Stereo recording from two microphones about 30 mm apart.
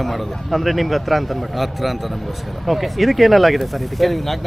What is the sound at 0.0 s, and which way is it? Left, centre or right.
A man's voice, centre.